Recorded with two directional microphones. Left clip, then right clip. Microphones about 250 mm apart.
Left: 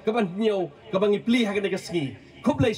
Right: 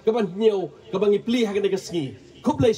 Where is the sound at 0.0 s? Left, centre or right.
Centre.